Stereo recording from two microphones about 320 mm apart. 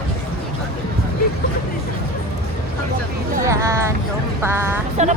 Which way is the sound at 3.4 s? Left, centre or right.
Centre.